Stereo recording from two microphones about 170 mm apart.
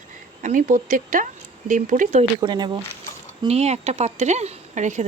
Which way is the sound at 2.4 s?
25° right (ahead or behind).